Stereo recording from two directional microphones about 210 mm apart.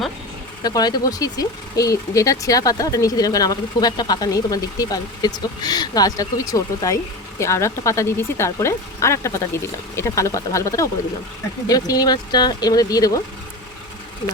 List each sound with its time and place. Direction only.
0.6 s speech: 20° left (ahead or behind)